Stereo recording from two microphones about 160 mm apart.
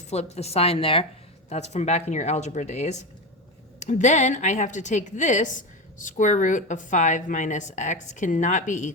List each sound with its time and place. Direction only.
0.1 s a woman's voice: 40° left (ahead or behind)